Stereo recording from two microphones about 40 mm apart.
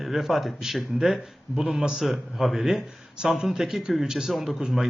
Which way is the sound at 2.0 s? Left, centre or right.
Centre.